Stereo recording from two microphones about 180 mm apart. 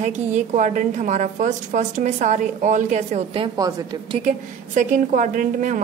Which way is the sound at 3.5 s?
20° right (ahead or behind).